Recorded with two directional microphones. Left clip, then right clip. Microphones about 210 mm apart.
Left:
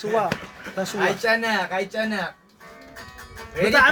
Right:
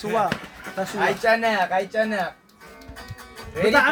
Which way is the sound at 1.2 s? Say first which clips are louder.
Right 2 dB; 35° left (ahead or behind).